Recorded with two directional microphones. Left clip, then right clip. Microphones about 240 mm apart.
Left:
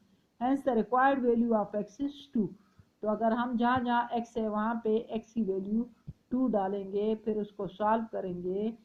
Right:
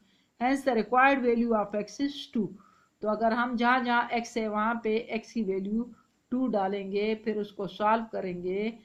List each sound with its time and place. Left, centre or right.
0.3 s speech: right
3.0 s speech: right